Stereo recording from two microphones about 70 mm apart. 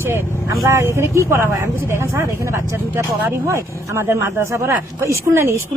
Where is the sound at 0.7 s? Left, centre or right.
Right.